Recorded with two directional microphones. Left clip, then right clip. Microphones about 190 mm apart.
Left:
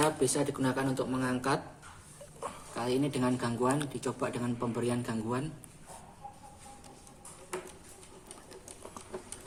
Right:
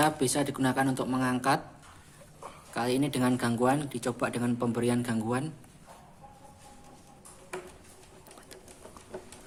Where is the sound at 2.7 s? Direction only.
45° right (ahead or behind).